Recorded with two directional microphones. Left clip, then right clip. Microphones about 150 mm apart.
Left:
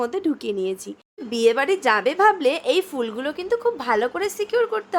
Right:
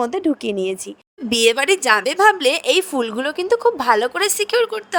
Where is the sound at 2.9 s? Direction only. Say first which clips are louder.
Right 5 dB; 35° right (ahead or behind).